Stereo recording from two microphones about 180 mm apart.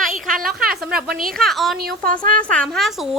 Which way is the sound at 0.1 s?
50° right (ahead or behind).